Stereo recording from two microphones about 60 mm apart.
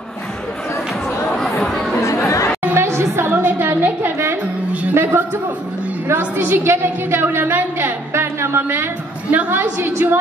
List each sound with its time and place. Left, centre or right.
1.6 s chatter: centre
2.0 s chatter: left
2.7 s chatter: right
3.4 s a sound: right
4.9 s a man's voice: right
8.1 s a sound: right
9.5 s a woman's voice: right